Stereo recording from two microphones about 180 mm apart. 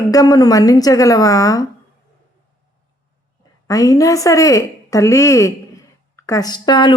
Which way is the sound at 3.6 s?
20° left (ahead or behind).